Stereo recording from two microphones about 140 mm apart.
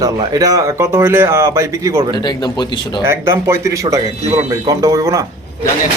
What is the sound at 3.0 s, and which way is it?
Speech, 20° right (ahead or behind).